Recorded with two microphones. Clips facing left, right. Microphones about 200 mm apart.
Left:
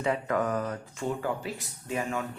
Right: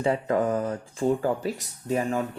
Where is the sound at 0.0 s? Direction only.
30° right (ahead or behind).